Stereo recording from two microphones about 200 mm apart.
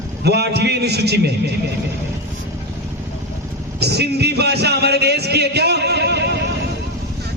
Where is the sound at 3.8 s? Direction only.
55° right (ahead or behind).